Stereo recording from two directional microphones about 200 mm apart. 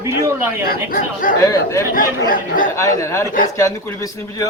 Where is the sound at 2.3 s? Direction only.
40° left (ahead or behind).